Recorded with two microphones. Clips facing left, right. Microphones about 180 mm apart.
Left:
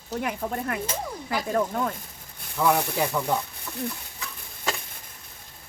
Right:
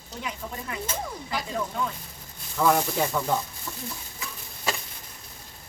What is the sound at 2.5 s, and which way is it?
Speech, 5° left (ahead or behind).